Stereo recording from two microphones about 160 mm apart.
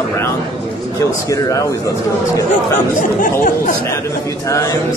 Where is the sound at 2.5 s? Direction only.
55° left (ahead or behind).